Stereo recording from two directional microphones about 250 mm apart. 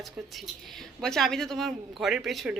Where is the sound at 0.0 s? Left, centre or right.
Centre.